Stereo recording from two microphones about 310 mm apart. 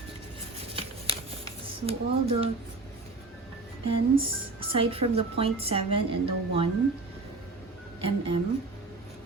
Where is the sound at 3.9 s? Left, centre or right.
Centre.